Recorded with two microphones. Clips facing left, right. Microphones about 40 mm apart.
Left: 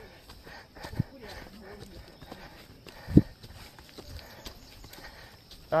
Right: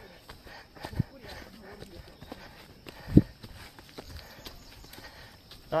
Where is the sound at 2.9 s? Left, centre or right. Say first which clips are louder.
Even; centre.